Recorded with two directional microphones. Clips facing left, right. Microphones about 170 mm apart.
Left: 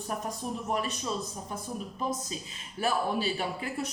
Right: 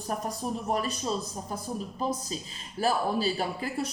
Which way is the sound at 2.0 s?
35° right (ahead or behind).